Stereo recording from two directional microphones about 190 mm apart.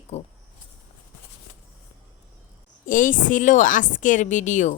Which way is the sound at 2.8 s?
45° left (ahead or behind).